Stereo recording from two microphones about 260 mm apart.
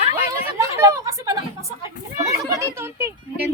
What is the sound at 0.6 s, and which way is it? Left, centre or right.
A child's voice, centre.